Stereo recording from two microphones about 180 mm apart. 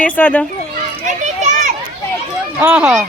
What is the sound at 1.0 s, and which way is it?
Children playing, 40° right (ahead or behind).